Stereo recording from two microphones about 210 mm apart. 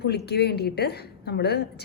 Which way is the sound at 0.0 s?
50° left (ahead or behind).